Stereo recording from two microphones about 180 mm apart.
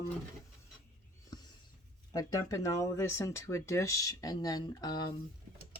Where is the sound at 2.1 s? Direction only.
20° left (ahead or behind).